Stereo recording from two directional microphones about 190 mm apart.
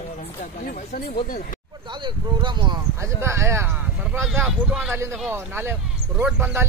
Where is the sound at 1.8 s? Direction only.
25° right (ahead or behind); by 4.9 s centre (ahead or behind).